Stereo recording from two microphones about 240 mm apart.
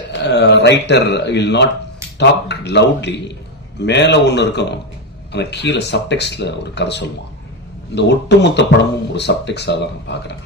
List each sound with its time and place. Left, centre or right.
0.1 s speech: left